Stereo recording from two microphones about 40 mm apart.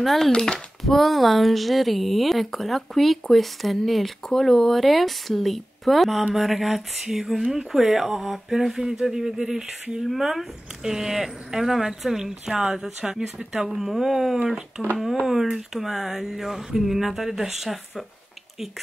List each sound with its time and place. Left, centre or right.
0.0 s a woman's voice: centre
0.3 s speech: left
0.8 s a woman's voice: centre
15.7 s speech: centre